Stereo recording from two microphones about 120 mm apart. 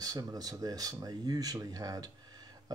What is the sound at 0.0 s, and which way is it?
Speech, 30° right (ahead or behind).